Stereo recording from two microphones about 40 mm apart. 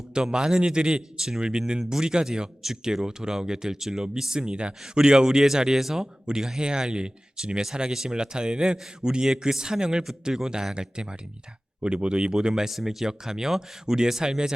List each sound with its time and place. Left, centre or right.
0.1 s a man's voice: right